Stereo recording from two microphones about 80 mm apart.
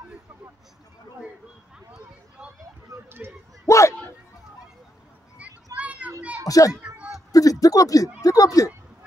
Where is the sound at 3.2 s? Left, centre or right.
Right.